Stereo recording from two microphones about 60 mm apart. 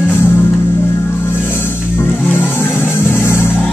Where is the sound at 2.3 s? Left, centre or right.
Left.